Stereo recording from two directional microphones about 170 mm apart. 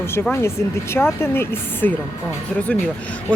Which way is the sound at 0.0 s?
15° left (ahead or behind).